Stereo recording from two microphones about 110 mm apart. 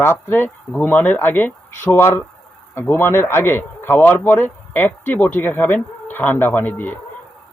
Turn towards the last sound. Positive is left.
turn(degrees=15)  # may be behind; listen again after turning